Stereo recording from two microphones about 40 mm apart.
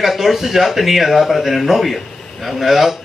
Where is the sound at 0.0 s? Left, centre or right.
Centre.